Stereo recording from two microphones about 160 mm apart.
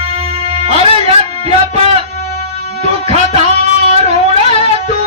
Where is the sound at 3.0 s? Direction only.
40° right (ahead or behind).